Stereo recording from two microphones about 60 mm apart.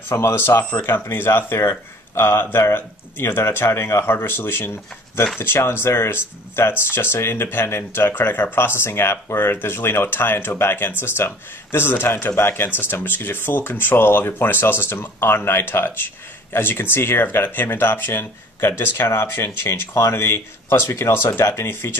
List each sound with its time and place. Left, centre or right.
0.1 s speech: left